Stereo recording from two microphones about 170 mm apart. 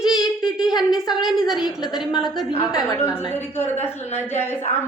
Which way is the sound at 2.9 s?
15° left (ahead or behind).